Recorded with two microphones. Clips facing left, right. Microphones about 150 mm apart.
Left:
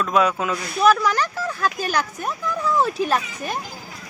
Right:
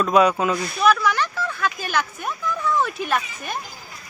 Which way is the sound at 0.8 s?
40° left (ahead or behind).